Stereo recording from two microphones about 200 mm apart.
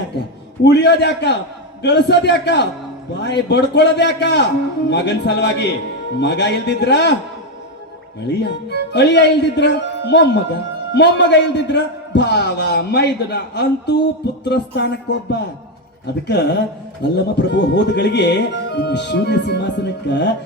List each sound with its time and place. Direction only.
0.6 s speech: 60° left (ahead or behind)
8.4 s speech: 55° left (ahead or behind)